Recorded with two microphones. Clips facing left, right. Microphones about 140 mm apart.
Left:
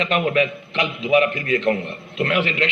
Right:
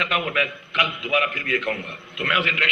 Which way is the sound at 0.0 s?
30° left (ahead or behind).